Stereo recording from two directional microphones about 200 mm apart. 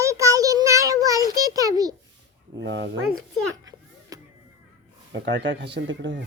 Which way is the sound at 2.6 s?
60° right (ahead or behind).